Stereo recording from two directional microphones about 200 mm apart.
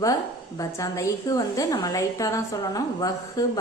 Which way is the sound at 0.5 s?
15° left (ahead or behind).